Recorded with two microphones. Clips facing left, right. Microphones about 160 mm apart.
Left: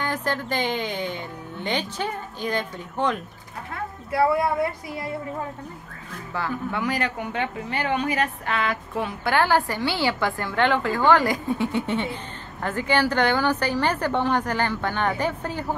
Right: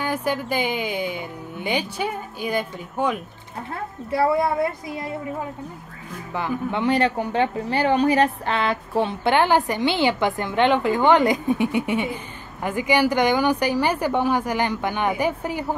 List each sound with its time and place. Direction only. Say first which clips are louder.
0.0 s speech: right 3 dB; 10° right (ahead or behind)
6.3 s speech: right 3 dB; 20° right (ahead or behind)